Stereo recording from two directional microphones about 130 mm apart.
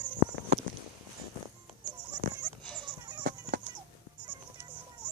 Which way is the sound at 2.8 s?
35° right (ahead or behind).